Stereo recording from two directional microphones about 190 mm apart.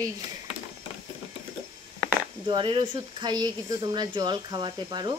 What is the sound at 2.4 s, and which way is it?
Speech, 25° right (ahead or behind).